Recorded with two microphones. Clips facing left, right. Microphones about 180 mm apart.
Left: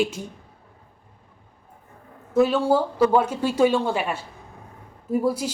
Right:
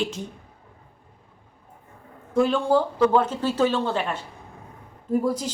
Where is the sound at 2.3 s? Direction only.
5° left (ahead or behind).